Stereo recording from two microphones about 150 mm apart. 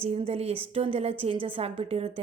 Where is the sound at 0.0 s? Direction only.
40° right (ahead or behind).